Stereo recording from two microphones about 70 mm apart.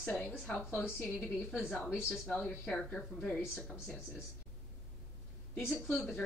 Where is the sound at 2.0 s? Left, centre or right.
Centre.